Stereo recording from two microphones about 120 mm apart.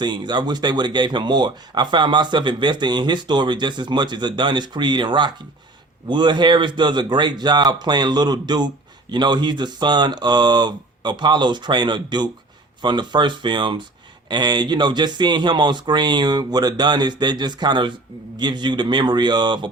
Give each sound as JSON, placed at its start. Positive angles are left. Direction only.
{"t": 0.0, "sound": "speech", "side_deg": -40}